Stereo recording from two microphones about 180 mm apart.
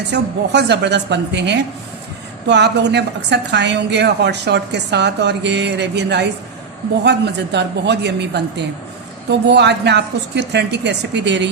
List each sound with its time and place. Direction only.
0.1 s a woman's voice: 70° right (ahead or behind)